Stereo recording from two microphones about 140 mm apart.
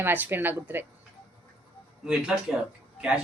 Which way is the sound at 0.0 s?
15° right (ahead or behind).